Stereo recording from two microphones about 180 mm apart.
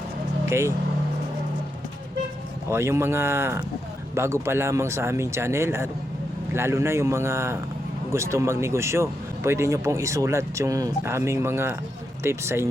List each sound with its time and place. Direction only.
0.4 s speech: 15° right (ahead or behind)
2.6 s speech: 15° right (ahead or behind)